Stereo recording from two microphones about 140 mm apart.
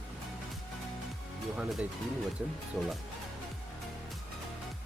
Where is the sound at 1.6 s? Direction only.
5° right (ahead or behind).